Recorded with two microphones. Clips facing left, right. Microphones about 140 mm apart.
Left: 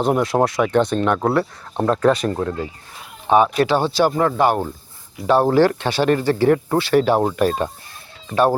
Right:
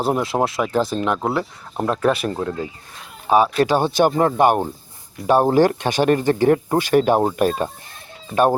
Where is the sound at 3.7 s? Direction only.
15° right (ahead or behind).